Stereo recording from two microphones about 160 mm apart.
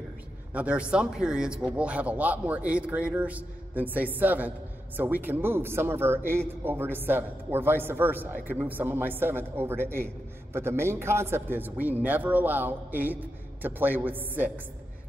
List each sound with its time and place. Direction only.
0.5 s a man's voice: 10° right (ahead or behind)